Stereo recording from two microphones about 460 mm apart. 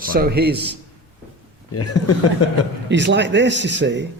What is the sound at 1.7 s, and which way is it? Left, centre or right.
Speech, left.